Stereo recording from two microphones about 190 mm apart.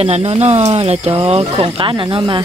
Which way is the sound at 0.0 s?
30° right (ahead or behind).